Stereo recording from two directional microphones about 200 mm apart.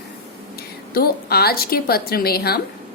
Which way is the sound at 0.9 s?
50° left (ahead or behind).